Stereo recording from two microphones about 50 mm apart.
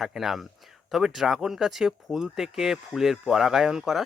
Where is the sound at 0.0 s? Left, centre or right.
Centre.